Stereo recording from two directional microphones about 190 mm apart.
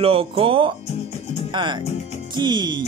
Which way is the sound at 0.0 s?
30° right (ahead or behind).